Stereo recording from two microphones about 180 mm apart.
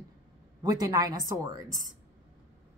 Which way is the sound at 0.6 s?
20° right (ahead or behind).